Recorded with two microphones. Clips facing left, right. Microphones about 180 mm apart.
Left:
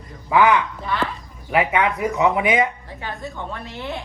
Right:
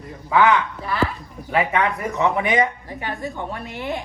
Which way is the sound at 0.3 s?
15° left (ahead or behind).